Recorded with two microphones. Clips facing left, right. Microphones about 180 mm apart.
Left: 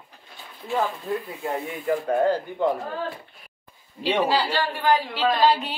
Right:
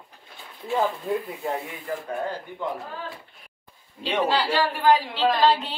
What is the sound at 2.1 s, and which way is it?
Speech, 75° left (ahead or behind).